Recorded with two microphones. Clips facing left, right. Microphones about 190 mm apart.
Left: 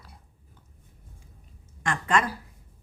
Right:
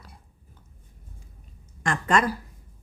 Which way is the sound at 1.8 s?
40° right (ahead or behind).